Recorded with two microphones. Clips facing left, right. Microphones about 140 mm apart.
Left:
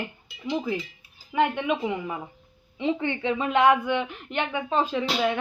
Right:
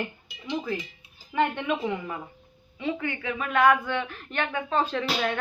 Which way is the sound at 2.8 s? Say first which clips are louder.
Left 4 dB; 25° left (ahead or behind).